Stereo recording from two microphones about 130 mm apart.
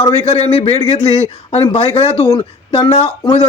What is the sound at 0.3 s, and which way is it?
A man's voice, 50° left (ahead or behind).